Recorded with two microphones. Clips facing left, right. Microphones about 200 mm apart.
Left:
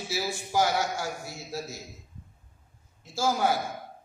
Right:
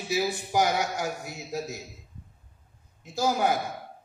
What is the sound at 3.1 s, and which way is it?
Speech, 20° right (ahead or behind).